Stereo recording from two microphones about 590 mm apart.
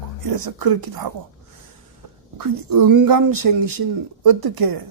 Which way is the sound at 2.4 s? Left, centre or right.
Right.